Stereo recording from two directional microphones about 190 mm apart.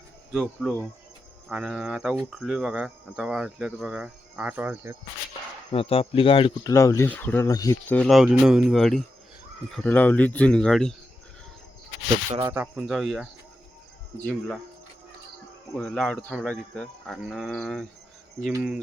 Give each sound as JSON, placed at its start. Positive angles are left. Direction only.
{"t": 0.3, "sound": "cricket", "side_deg": 5}
{"t": 5.7, "sound": "speech", "side_deg": 30}
{"t": 6.7, "sound": "speech", "side_deg": 15}
{"t": 7.9, "sound": "cricket", "side_deg": 0}
{"t": 9.7, "sound": "speech", "side_deg": 10}
{"t": 12.4, "sound": "cricket", "side_deg": -10}
{"t": 14.3, "sound": "cricket", "side_deg": 5}
{"t": 15.8, "sound": "cricket", "side_deg": 5}